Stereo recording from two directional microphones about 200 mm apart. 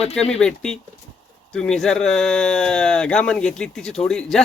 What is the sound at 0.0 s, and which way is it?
Speech, 30° left (ahead or behind).